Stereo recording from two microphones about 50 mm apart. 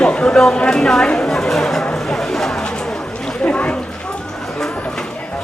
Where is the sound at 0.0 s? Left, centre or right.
Centre.